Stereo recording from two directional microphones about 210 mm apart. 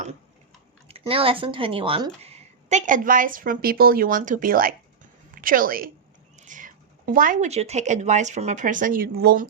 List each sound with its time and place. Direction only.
0.9 s a woman's voice: 25° right (ahead or behind); by 9.5 s 45° right (ahead or behind)